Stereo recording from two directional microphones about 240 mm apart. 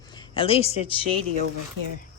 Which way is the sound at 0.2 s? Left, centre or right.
Left.